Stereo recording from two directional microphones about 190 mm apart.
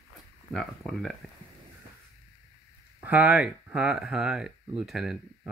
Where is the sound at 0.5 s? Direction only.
Centre (ahead or behind).